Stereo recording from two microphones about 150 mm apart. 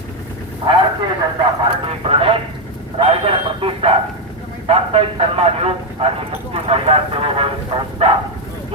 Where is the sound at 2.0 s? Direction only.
40° right (ahead or behind).